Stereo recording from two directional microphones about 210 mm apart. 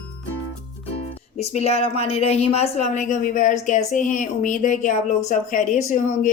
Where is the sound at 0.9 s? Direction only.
30° left (ahead or behind).